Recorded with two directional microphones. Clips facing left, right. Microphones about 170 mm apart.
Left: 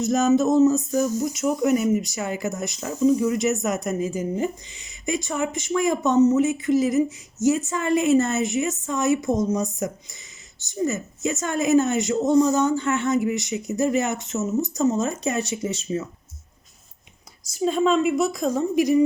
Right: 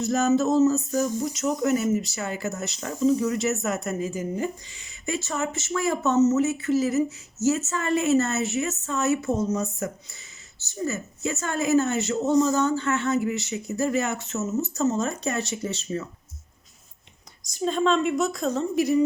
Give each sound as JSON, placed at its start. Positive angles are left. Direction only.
{"t": 0.0, "sound": "speech", "side_deg": 20}
{"t": 17.5, "sound": "speech", "side_deg": 10}